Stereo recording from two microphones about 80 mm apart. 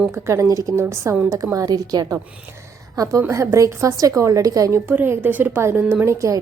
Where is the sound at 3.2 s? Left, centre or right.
Right.